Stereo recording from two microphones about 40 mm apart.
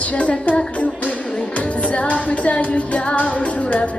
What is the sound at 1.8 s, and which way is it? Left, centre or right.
Music, left.